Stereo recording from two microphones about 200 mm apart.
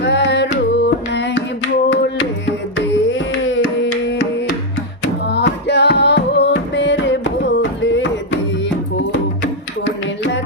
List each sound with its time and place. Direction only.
0.0 s music: 60° left (ahead or behind)
5.3 s music: 60° left (ahead or behind)
9.8 s music: 60° left (ahead or behind)